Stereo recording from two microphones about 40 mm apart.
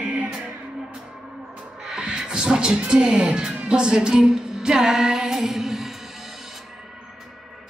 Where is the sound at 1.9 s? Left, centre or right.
Right.